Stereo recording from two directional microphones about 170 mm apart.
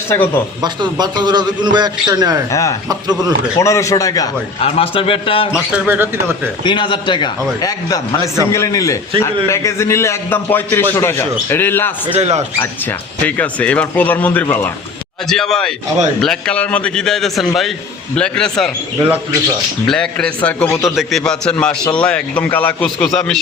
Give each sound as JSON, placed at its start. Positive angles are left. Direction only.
{"t": 0.6, "sound": "a man's voice", "side_deg": -25}
{"t": 2.5, "sound": "speech", "side_deg": 20}
{"t": 2.9, "sound": "a man's voice", "side_deg": -25}
{"t": 3.6, "sound": "a man's voice", "side_deg": 15}
{"t": 4.6, "sound": "a man's voice", "side_deg": 35}
{"t": 5.5, "sound": "speech", "side_deg": -5}
{"t": 6.7, "sound": "a man's voice", "side_deg": 30}
{"t": 12.0, "sound": "speech", "side_deg": -35}
{"t": 12.5, "sound": "a man's voice", "side_deg": 10}
{"t": 18.9, "sound": "speech", "side_deg": -15}
{"t": 19.9, "sound": "a man's voice", "side_deg": 5}